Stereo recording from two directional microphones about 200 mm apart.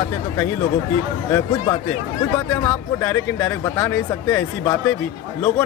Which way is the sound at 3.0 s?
10° left (ahead or behind).